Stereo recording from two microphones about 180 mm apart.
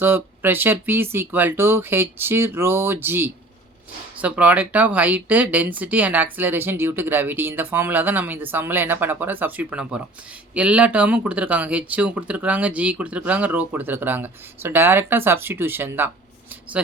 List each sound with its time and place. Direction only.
0.0 s speech: 10° right (ahead or behind)